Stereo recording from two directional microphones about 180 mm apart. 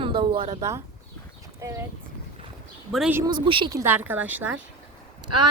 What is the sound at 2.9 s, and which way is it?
Speech, centre (ahead or behind).